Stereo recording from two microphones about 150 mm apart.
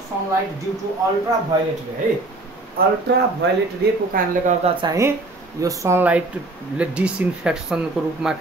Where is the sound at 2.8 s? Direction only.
85° right.